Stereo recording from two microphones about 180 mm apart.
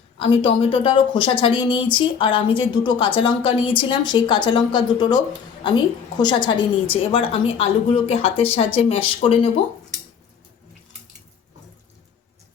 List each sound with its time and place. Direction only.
0.2 s a woman's voice: 30° left (ahead or behind)